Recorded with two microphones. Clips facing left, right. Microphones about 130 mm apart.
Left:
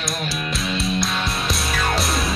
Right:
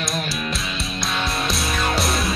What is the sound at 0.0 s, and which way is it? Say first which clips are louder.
Music: right 1 dB; centre (ahead or behind).